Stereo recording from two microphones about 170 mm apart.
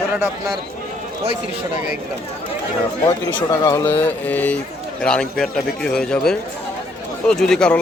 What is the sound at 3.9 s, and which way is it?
A man's voice, 10° left (ahead or behind).